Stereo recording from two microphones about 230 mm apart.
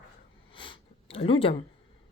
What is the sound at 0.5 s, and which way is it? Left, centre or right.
Speech, left.